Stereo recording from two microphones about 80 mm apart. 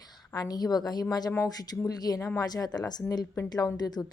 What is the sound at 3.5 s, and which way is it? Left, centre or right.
Speech, left.